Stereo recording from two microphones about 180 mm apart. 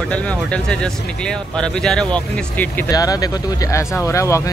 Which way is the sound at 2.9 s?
20° left (ahead or behind).